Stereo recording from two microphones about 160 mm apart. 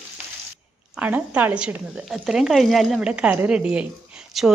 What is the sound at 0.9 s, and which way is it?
A woman's voice, 10° right (ahead or behind).